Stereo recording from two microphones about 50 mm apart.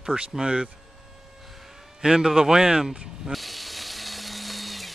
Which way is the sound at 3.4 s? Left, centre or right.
Centre.